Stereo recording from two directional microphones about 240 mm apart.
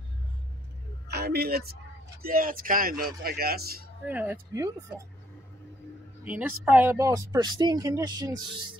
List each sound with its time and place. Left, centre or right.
1.1 s a woman's voice: right
4.1 s speech: centre
6.2 s speech: centre